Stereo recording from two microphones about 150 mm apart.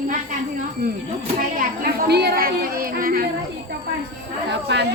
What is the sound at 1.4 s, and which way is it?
A woman's voice, 75° right (ahead or behind).